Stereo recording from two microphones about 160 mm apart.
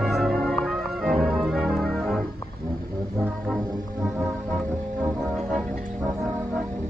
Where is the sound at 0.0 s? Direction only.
Centre (ahead or behind).